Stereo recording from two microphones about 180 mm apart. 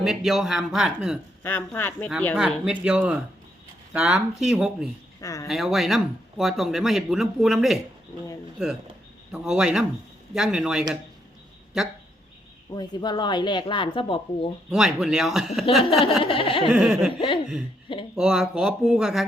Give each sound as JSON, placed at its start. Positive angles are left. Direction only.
{"t": 0.0, "sound": "speech", "side_deg": 0}
{"t": 1.4, "sound": "speech", "side_deg": 10}
{"t": 2.3, "sound": "speech", "side_deg": -5}
{"t": 5.2, "sound": "speech", "side_deg": 20}
{"t": 5.5, "sound": "speech", "side_deg": 0}
{"t": 12.7, "sound": "speech", "side_deg": 25}
{"t": 14.7, "sound": "speech", "side_deg": 0}
{"t": 16.2, "sound": "speech", "side_deg": 30}
{"t": 16.7, "sound": "speech", "side_deg": -5}
{"t": 17.2, "sound": "speech", "side_deg": 30}
{"t": 18.2, "sound": "speech", "side_deg": -5}